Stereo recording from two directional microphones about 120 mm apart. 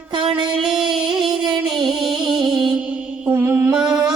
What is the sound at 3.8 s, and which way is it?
Music, 5° right (ahead or behind).